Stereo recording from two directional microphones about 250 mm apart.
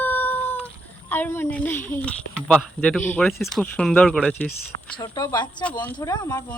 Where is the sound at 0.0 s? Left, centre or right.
Centre.